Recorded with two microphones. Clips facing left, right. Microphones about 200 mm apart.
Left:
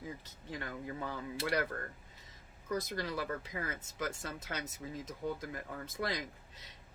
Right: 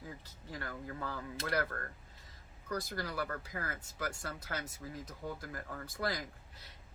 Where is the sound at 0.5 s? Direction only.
20° left (ahead or behind).